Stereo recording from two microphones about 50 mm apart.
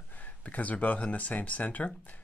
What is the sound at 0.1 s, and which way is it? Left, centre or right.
Speech, left.